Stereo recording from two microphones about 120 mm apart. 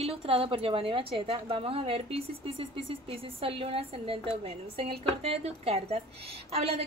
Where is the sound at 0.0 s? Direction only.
55° right (ahead or behind).